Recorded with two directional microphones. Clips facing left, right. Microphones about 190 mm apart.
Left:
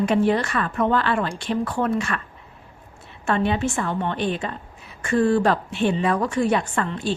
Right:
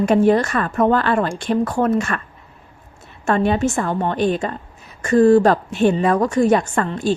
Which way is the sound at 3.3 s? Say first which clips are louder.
Right 4 dB; 45° right (ahead or behind).